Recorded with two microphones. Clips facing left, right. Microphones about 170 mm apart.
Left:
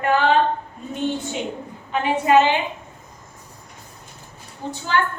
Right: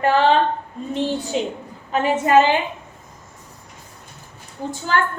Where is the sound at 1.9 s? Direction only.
45° right (ahead or behind).